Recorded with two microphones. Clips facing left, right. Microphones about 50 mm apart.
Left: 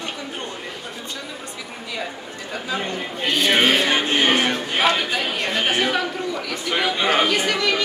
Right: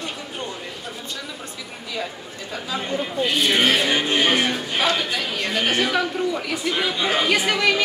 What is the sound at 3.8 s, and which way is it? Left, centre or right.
Speech, left.